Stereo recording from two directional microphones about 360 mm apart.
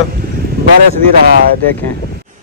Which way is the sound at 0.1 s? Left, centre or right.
Right.